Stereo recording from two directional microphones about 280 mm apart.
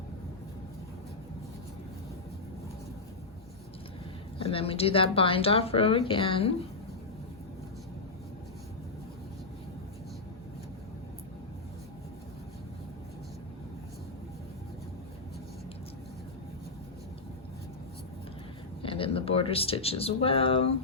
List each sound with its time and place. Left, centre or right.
4.4 s speech: centre
18.8 s speech: centre